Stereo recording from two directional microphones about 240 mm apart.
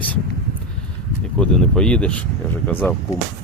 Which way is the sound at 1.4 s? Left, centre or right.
Centre.